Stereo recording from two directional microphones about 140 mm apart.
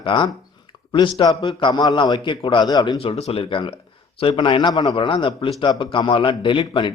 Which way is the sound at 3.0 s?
45° left (ahead or behind).